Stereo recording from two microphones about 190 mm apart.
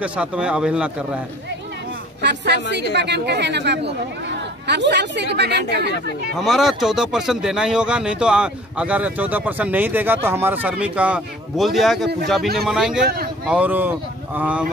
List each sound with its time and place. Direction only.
0.0 s a man's voice: 5° right (ahead or behind)
2.2 s speech: 60° right (ahead or behind)
6.3 s a man's voice: centre (ahead or behind)